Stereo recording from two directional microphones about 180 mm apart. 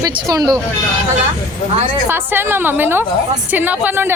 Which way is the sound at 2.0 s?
10° right (ahead or behind).